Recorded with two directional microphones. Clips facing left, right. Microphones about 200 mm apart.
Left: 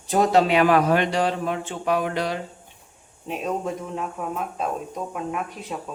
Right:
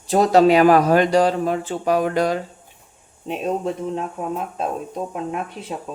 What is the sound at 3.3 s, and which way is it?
Speech, 30° right (ahead or behind).